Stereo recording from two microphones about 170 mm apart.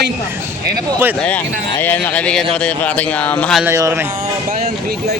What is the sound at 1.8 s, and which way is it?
A man's voice, 10° left (ahead or behind).